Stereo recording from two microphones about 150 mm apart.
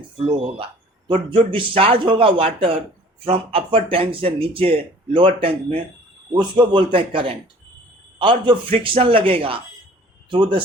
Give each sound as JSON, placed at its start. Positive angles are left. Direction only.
{"t": 0.3, "sound": "a man's voice", "side_deg": -40}